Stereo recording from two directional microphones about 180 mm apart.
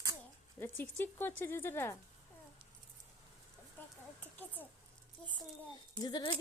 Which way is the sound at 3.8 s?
10° left (ahead or behind).